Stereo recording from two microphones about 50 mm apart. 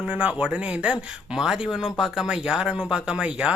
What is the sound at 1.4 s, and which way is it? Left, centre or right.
Speech, centre.